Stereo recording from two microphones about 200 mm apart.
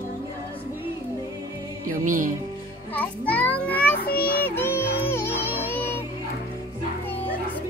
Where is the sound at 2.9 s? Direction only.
5° left (ahead or behind).